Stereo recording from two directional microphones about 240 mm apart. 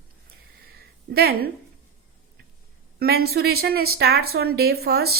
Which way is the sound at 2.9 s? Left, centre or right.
Right.